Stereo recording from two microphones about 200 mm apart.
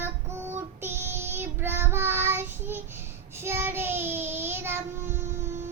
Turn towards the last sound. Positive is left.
turn(degrees=-10)  # may be behind; listen again after turning